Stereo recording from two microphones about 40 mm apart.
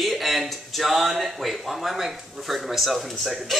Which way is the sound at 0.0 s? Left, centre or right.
Centre.